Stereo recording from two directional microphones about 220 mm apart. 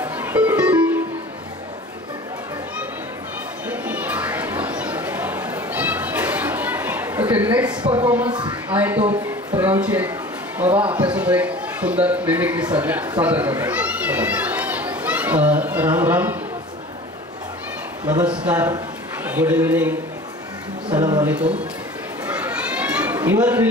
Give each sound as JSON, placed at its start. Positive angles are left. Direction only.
{"t": 0.0, "sound": "music", "side_deg": -10}
{"t": 3.6, "sound": "a sound", "side_deg": -5}
{"t": 7.5, "sound": "speech", "side_deg": -5}
{"t": 13.2, "sound": "children playing", "side_deg": -5}
{"t": 18.2, "sound": "a man's voice", "side_deg": -5}
{"t": 20.9, "sound": "speech", "side_deg": -20}
{"t": 21.3, "sound": "speech", "side_deg": -5}
{"t": 22.3, "sound": "children playing", "side_deg": -5}